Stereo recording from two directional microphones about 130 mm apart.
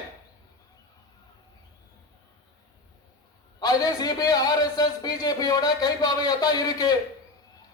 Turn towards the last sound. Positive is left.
turn(degrees=30)  # may be behind; listen again after turning